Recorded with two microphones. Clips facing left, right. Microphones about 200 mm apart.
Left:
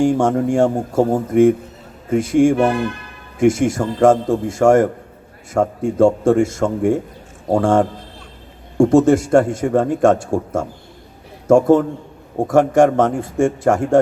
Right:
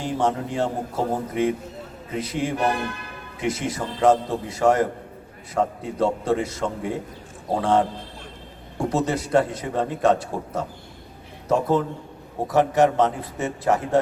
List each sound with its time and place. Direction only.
0.0 s a man's voice: 45° left (ahead or behind)